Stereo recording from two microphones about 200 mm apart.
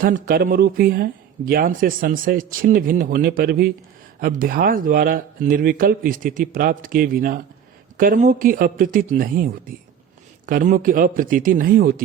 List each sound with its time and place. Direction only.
0.0 s speech: 45° right (ahead or behind)